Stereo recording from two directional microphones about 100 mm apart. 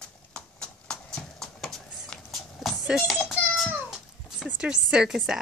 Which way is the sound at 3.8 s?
5° right (ahead or behind).